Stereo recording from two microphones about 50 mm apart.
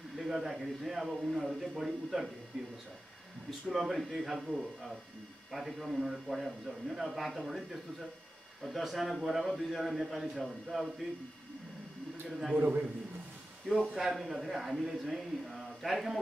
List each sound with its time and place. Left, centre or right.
0.1 s speech: centre
3.4 s speech: centre
12.3 s speech: centre
12.5 s a man's voice: right
13.7 s speech: centre